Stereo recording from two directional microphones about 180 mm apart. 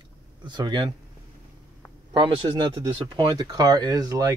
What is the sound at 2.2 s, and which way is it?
Speech, 25° right (ahead or behind).